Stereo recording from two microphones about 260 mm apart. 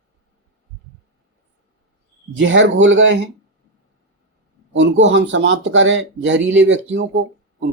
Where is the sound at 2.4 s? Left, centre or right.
Right.